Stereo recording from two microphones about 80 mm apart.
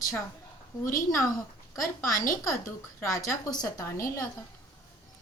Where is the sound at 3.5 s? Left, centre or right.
Left.